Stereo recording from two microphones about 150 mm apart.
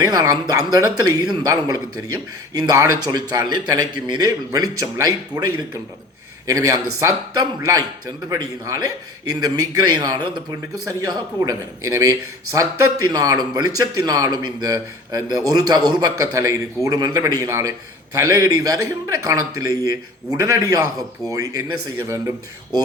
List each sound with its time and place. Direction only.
0.0 s a man's voice: 25° right (ahead or behind)